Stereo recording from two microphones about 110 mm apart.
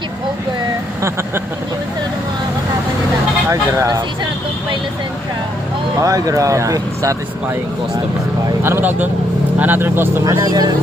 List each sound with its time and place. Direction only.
3.5 s speech: 30° right (ahead or behind)
6.0 s speech: 30° right (ahead or behind)
8.6 s speech: 20° right (ahead or behind)
10.2 s speech: 35° right (ahead or behind)